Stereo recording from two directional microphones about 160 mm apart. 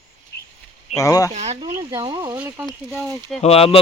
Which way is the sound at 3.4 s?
40° left (ahead or behind).